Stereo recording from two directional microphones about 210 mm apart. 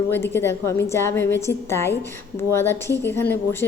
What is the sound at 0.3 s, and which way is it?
A woman's voice, 10° left (ahead or behind).